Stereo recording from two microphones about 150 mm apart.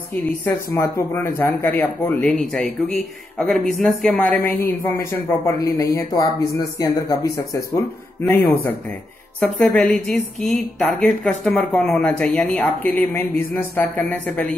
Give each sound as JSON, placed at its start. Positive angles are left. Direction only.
{"t": 0.7, "sound": "speech", "side_deg": 20}
{"t": 4.5, "sound": "speech", "side_deg": 15}
{"t": 10.1, "sound": "a sound", "side_deg": -50}
{"t": 10.8, "sound": "speech", "side_deg": 10}